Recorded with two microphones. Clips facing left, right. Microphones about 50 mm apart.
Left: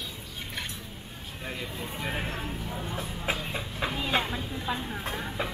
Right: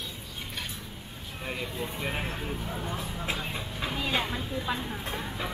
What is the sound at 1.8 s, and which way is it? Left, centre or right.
Speech, centre.